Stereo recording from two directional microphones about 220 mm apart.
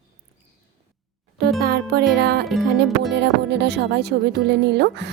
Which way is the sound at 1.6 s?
45° right (ahead or behind).